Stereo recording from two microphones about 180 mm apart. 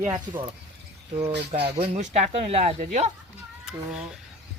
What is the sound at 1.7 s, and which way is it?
Speech, 40° right (ahead or behind).